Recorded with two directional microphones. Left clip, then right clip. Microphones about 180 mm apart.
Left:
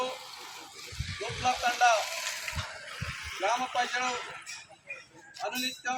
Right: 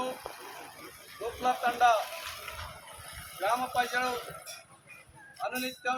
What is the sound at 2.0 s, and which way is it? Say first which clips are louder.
Water: left 5 dB; 50° right (ahead or behind).